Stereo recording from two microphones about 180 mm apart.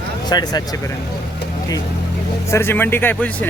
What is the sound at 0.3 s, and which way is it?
Speech, 20° left (ahead or behind).